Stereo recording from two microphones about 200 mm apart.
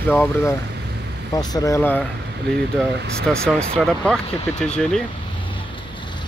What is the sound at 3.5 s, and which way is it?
Speech, 5° left (ahead or behind).